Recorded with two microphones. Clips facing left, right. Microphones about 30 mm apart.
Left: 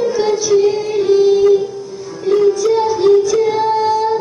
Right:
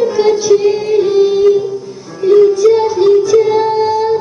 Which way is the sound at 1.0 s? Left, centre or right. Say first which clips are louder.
Left 1 dB; centre.